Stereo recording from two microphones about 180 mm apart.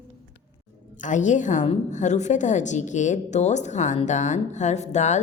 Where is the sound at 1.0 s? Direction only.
45° left (ahead or behind).